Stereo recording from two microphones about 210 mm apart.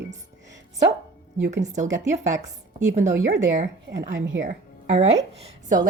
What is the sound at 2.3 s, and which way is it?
Speech, 15° right (ahead or behind).